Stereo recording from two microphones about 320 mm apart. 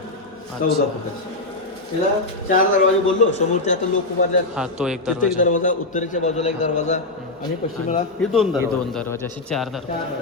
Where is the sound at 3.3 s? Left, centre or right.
Left.